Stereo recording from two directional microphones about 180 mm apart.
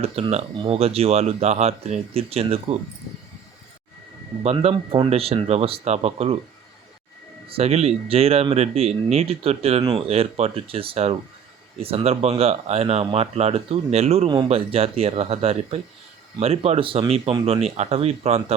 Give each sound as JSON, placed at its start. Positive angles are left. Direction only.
{"t": 0.0, "sound": "speech", "side_deg": -35}
{"t": 4.5, "sound": "speech", "side_deg": -30}
{"t": 7.5, "sound": "speech", "side_deg": -35}